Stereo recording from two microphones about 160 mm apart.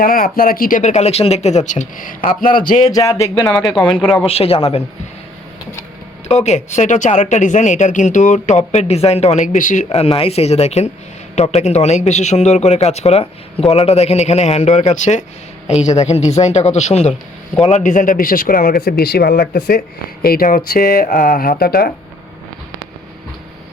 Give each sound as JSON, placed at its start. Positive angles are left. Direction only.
{"t": 0.0, "sound": "speech", "side_deg": 65}
{"t": 2.8, "sound": "speech", "side_deg": 20}
{"t": 3.5, "sound": "speech", "side_deg": 0}
{"t": 4.3, "sound": "speech", "side_deg": 35}
{"t": 6.2, "sound": "speech", "side_deg": 45}